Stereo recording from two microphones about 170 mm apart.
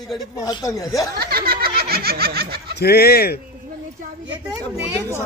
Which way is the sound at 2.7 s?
70° left (ahead or behind).